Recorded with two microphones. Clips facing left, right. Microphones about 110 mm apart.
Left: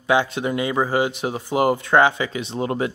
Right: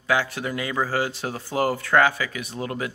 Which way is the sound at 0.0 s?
20° left (ahead or behind).